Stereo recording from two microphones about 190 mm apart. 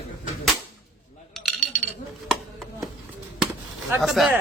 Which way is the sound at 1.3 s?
5° left (ahead or behind).